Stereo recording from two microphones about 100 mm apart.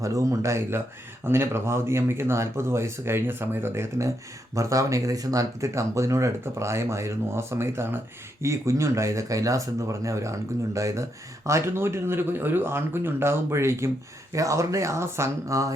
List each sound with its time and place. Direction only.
0.0 s speech: 35° right (ahead or behind)